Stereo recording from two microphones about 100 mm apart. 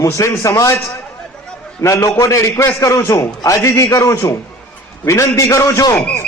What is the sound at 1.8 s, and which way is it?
A man's voice, 30° left (ahead or behind).